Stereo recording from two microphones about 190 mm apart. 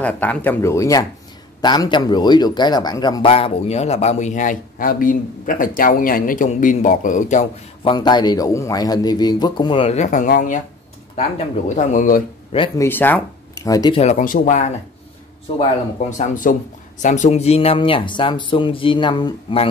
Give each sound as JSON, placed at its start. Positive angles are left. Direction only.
{"t": 0.0, "sound": "a man's voice", "side_deg": 10}
{"t": 7.8, "sound": "a man's voice", "side_deg": 25}
{"t": 12.5, "sound": "a man's voice", "side_deg": 25}
{"t": 12.8, "sound": "speech", "side_deg": 10}
{"t": 14.0, "sound": "a man's voice", "side_deg": 45}
{"t": 16.1, "sound": "a man's voice", "side_deg": 45}